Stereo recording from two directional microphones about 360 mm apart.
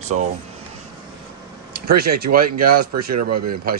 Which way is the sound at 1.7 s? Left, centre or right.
Right.